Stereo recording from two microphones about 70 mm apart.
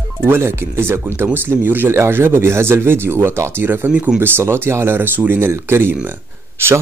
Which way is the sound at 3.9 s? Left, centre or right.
Centre.